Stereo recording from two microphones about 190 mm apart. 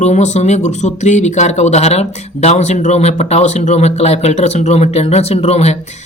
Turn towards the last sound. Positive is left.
turn(degrees=35)  # may be behind; listen again after turning